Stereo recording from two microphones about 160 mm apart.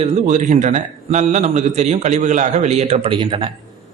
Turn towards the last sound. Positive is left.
turn(degrees=-35)  # may be behind; listen again after turning